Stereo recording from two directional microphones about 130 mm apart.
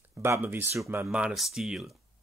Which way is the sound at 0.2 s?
15° right (ahead or behind).